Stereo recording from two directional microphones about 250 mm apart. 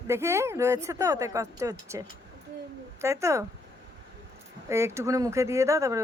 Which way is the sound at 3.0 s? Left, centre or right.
Centre.